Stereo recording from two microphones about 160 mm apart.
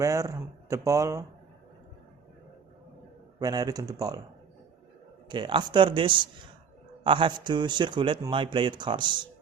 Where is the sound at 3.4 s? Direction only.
25° right (ahead or behind).